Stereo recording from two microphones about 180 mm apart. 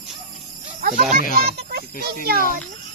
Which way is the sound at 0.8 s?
50° right (ahead or behind).